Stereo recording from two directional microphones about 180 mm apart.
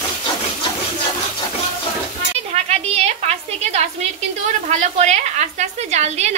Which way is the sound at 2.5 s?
35° right (ahead or behind).